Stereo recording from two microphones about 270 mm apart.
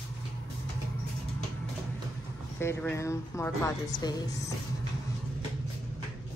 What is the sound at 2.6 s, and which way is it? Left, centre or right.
Speech, centre.